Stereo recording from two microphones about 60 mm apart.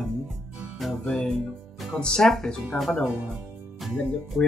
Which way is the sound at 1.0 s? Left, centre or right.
Centre.